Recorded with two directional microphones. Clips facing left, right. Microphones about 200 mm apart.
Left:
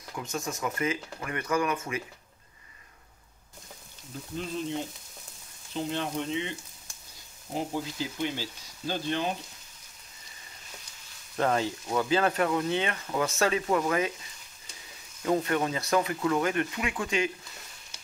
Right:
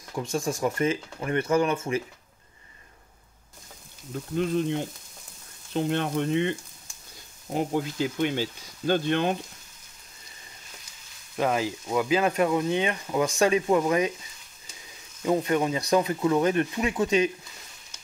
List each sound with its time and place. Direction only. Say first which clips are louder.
0.1 s speech: right 6 dB; 30° right (ahead or behind)
4.4 s speech: right 7 dB; 60° right (ahead or behind)
7.5 s speech: right 5 dB; 60° right (ahead or behind)
11.3 s speech: right 1 dB; 5° right (ahead or behind)
15.4 s speech: right 4 dB; 20° right (ahead or behind)